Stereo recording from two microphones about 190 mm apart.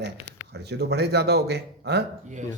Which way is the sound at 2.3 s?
40° right (ahead or behind).